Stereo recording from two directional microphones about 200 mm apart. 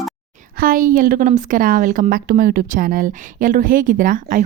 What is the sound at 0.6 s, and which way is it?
A woman's voice, 45° right (ahead or behind).